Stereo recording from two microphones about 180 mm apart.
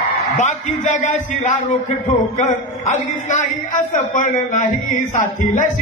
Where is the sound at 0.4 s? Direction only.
45° left (ahead or behind).